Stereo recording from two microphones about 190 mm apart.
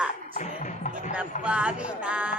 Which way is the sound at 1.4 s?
5° right (ahead or behind).